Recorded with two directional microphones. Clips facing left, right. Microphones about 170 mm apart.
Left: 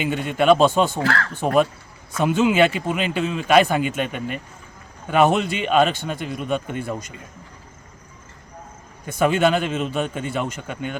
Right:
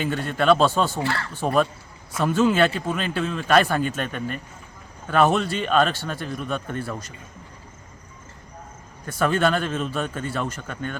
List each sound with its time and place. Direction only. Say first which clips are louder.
0.0 s a man's voice: left 3 dB; 15° left (ahead or behind)
1.0 s speech: left 4 dB; 90° left
2.2 s a man's voice: left 2 dB; 10° left (ahead or behind)
9.1 s a man's voice: left 3 dB; 10° left (ahead or behind)